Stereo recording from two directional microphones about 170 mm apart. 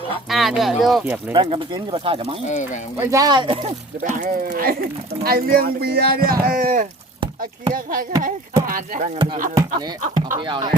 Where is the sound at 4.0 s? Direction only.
50° right (ahead or behind).